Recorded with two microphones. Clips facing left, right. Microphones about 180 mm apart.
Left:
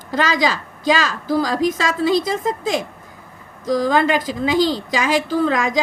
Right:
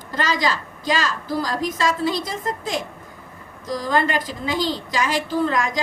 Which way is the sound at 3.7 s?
90° left.